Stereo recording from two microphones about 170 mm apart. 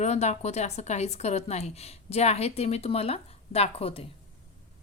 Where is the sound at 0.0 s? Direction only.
40° left (ahead or behind).